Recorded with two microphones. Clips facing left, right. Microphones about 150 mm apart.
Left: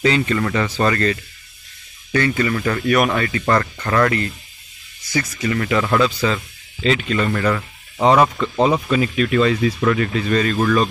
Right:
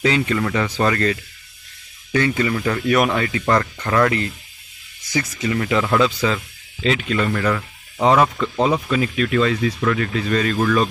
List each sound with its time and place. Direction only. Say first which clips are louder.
0.0 s speech: left 1 dB; 5° right (ahead or behind)
7.2 s speech: left 1 dB; 5° left (ahead or behind)
10.3 s speech: left 1 dB; centre (ahead or behind)